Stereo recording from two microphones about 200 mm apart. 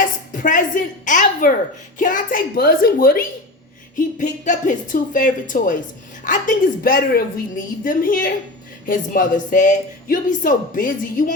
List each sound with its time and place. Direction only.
0.4 s a woman's voice: 40° left (ahead or behind)